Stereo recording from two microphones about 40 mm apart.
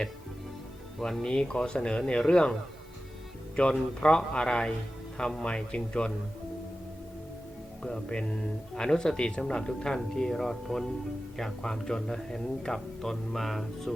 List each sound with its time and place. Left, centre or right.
1.2 s speech: centre
7.8 s speech: centre